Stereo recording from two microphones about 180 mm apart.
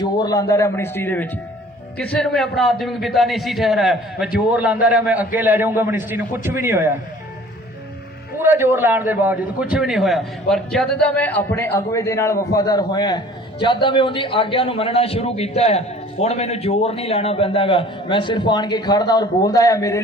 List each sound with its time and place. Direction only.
0.0 s a man's voice: 20° left (ahead or behind); by 6.9 s 15° right (ahead or behind)
8.4 s a man's voice: 15° right (ahead or behind); by 20.0 s 15° left (ahead or behind)